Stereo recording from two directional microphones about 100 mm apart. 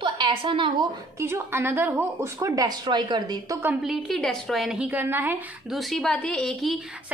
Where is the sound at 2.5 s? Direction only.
45° right (ahead or behind).